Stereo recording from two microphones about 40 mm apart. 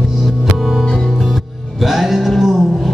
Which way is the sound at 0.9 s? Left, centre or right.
Centre.